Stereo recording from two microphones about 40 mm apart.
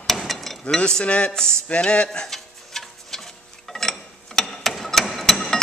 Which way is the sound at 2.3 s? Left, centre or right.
Centre.